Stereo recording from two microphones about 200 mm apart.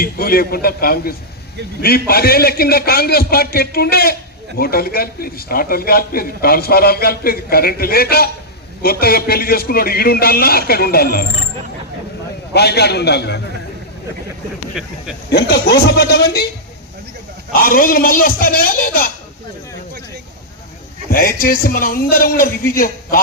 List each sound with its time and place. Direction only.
0.0 s a man's voice: 50° left (ahead or behind)
12.5 s a man's voice: 55° left (ahead or behind)
15.3 s a man's voice: 50° left (ahead or behind)
17.5 s a man's voice: 45° left (ahead or behind)
21.1 s a man's voice: 45° left (ahead or behind)